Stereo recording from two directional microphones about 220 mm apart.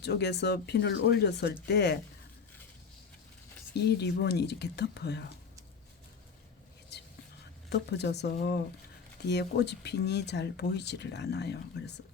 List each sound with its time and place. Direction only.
0.0 s speech: 50° left (ahead or behind)
3.8 s speech: 50° left (ahead or behind)
6.9 s whispering: 50° left (ahead or behind)
7.7 s speech: 50° left (ahead or behind)